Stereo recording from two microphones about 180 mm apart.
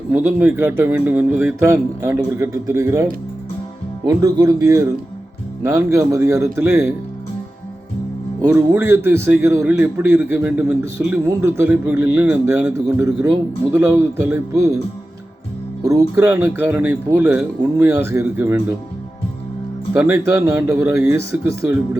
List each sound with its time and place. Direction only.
0.1 s a man's voice: 10° right (ahead or behind)
8.4 s a man's voice: 15° right (ahead or behind)
15.8 s a man's voice: 15° right (ahead or behind)
19.9 s a man's voice: 15° right (ahead or behind)